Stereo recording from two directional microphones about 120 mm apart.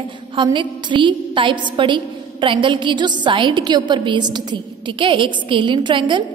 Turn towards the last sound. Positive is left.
turn(degrees=-40)  # may be behind; listen again after turning